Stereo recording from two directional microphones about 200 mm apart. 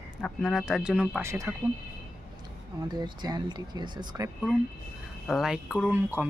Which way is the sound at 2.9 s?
20° right (ahead or behind).